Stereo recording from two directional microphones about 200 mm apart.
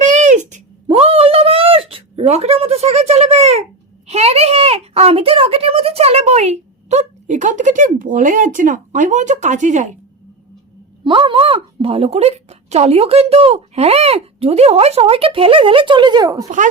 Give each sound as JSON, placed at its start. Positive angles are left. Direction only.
{"t": 0.0, "sound": "a sound", "side_deg": -40}
{"t": 4.0, "sound": "speech", "side_deg": -30}
{"t": 11.0, "sound": "a woman's voice", "side_deg": -25}